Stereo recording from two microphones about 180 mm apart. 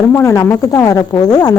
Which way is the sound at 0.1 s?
15° left (ahead or behind).